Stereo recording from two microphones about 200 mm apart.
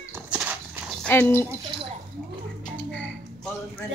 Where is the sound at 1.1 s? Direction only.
10° left (ahead or behind).